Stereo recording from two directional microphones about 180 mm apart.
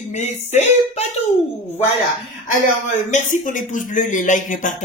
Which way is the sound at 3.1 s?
45° left (ahead or behind).